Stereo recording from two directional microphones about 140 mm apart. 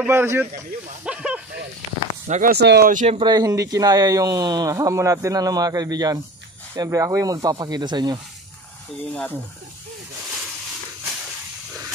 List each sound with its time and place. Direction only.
0.0 s speech: 15° right (ahead or behind)
1.0 s snake: 5° right (ahead or behind)
2.2 s speech: 70° right (ahead or behind)
3.3 s speech: 25° right (ahead or behind)
9.1 s speech: 5° left (ahead or behind)